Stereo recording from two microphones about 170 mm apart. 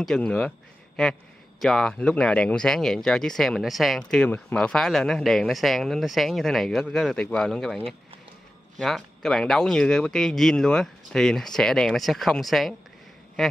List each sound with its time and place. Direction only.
0.0 s speech: 5° left (ahead or behind)